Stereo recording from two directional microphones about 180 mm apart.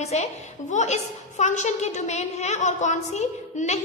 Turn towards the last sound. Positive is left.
turn(degrees=40)  # may be behind; listen again after turning